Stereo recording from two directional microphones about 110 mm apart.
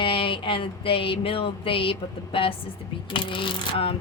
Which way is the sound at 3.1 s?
50° left (ahead or behind).